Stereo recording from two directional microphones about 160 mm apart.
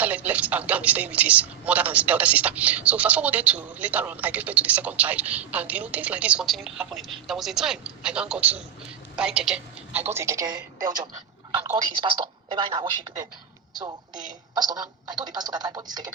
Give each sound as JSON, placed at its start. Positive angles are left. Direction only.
{"t": 0.0, "sound": "speech", "side_deg": -10}
{"t": 10.0, "sound": "speech", "side_deg": -15}
{"t": 11.5, "sound": "speech", "side_deg": -10}
{"t": 11.8, "sound": "a woman's voice", "side_deg": -30}
{"t": 14.1, "sound": "a woman's voice", "side_deg": -55}
{"t": 14.5, "sound": "speech", "side_deg": -25}